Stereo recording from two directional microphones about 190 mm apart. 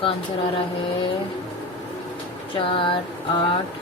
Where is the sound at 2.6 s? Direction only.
25° left (ahead or behind).